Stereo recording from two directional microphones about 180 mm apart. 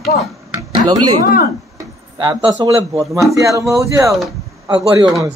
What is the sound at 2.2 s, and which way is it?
Speech, 25° right (ahead or behind).